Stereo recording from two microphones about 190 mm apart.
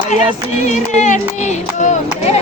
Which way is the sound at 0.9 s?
40° left (ahead or behind).